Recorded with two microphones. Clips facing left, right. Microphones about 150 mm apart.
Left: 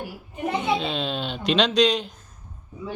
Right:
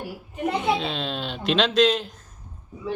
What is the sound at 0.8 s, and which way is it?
Speech, centre (ahead or behind).